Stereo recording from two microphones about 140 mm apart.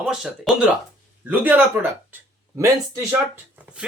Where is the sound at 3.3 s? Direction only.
10° right (ahead or behind).